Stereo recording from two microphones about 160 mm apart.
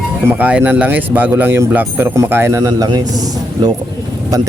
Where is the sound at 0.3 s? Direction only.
10° right (ahead or behind).